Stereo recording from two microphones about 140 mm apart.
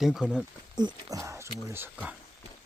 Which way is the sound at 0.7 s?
25° right (ahead or behind).